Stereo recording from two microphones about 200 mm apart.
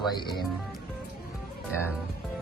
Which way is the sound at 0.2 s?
20° left (ahead or behind).